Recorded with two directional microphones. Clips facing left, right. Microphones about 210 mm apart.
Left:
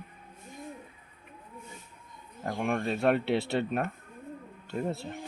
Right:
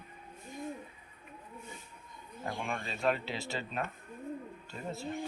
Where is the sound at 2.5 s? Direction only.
55° left (ahead or behind).